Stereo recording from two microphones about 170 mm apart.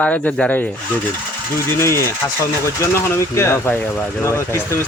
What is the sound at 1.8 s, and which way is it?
Speech, 15° left (ahead or behind).